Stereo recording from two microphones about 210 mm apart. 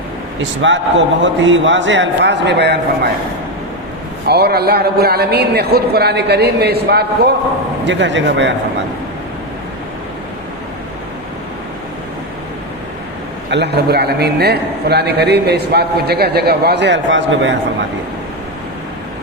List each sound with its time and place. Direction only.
0.6 s a man's voice: 60° right (ahead or behind)
4.3 s a man's voice: 50° right (ahead or behind)
13.5 s a man's voice: 55° right (ahead or behind)